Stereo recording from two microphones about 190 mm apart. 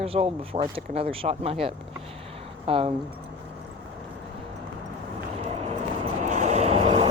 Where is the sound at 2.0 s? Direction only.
30° right (ahead or behind).